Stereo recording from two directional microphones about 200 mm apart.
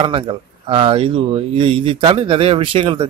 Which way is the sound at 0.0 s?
25° right (ahead or behind).